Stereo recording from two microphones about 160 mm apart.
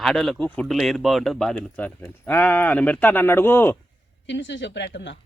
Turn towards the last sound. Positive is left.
turn(degrees=90)